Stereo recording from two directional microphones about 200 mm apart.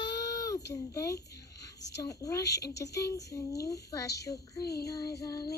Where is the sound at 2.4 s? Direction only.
55° left (ahead or behind).